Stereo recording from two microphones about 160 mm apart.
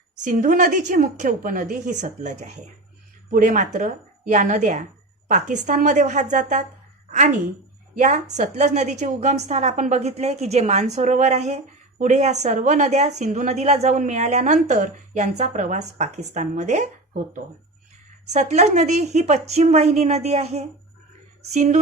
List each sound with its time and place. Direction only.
0.3 s a woman's voice: 55° right (ahead or behind)
7.9 s a woman's voice: 50° right (ahead or behind)
18.3 s a woman's voice: 45° right (ahead or behind)